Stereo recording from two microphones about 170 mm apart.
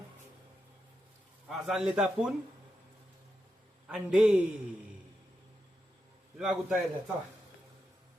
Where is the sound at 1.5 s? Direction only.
Centre (ahead or behind).